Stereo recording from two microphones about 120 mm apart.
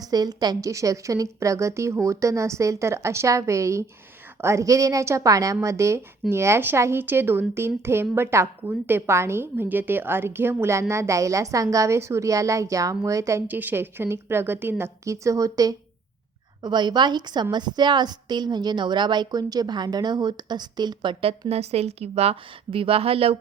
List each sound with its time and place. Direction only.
0.1 s a woman's voice: 35° right (ahead or behind)
13.5 s a woman's voice: 15° right (ahead or behind); by 23.4 s 55° right (ahead or behind)